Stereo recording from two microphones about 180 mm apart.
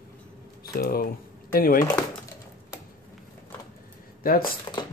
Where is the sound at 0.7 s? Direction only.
55° left (ahead or behind).